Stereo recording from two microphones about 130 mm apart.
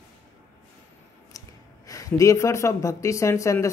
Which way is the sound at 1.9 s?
25° left (ahead or behind).